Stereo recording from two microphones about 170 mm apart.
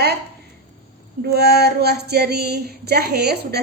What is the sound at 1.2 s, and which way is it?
Child singing, 70° right (ahead or behind).